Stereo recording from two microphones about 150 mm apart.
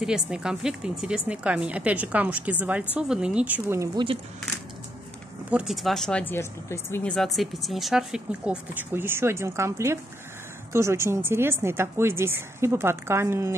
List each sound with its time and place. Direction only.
0.0 s a woman's voice: 5° right (ahead or behind)
3.9 s speech: 35° right (ahead or behind)
5.5 s a woman's voice: 5° right (ahead or behind)